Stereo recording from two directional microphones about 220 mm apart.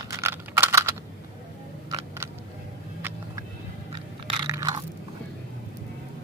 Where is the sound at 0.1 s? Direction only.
10° right (ahead or behind).